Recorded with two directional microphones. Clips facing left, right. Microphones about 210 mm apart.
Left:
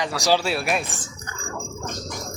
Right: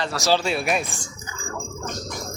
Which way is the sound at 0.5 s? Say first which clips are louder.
Right 1 dB; centre (ahead or behind).